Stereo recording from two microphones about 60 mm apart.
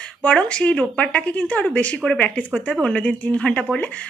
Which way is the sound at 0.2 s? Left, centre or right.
Centre.